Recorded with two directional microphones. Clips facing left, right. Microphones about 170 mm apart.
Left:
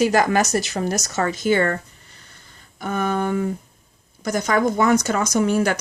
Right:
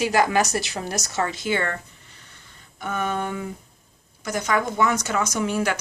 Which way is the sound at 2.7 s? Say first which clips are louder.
Left 4 dB; 40° left (ahead or behind).